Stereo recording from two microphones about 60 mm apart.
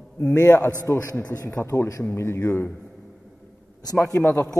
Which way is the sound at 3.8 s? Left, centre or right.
Left.